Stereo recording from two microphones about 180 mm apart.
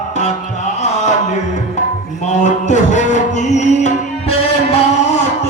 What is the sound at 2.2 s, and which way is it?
Music, 40° left (ahead or behind).